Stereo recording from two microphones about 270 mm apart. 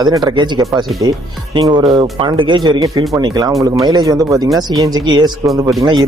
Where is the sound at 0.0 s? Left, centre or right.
Centre.